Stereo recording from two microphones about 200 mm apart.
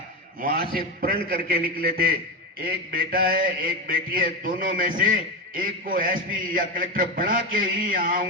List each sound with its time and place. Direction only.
0.7 s mantra: 45° right (ahead or behind)